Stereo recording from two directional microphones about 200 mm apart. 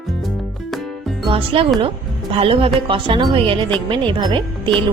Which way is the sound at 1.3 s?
25° right (ahead or behind).